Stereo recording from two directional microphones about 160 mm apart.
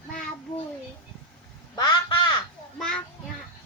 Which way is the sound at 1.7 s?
30° left (ahead or behind).